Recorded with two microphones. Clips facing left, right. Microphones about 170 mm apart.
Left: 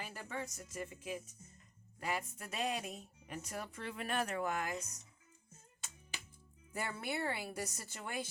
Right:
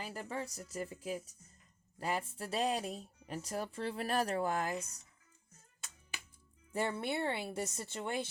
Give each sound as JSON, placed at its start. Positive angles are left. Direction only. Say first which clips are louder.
{"t": 0.0, "sound": "speech", "louder": "right 3 dB", "side_deg": -35}
{"t": 6.7, "sound": "a woman's voice", "louder": "right 5 dB", "side_deg": -25}